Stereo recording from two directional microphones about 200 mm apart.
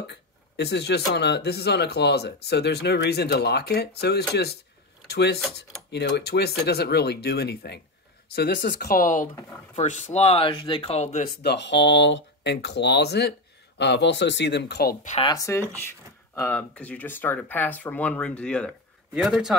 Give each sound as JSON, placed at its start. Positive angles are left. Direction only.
{"t": 0.0, "sound": "speech", "side_deg": 55}
{"t": 11.2, "sound": "speech", "side_deg": 60}
{"t": 15.0, "sound": "speech", "side_deg": 30}
{"t": 15.3, "sound": "speech", "side_deg": 15}